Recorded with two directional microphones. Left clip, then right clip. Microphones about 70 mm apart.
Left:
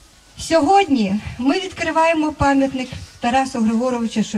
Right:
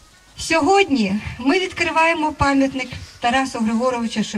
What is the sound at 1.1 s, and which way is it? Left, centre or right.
A woman's voice, right.